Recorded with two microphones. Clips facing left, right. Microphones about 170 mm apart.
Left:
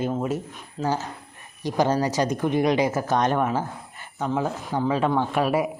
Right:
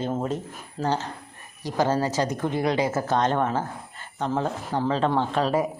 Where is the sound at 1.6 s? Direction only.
15° left (ahead or behind).